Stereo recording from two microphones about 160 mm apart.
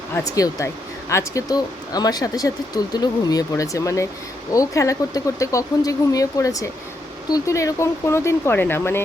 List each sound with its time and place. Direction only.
0.3 s speech: 20° left (ahead or behind)